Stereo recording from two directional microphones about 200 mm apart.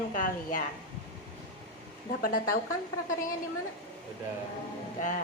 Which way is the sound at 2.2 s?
45° left (ahead or behind).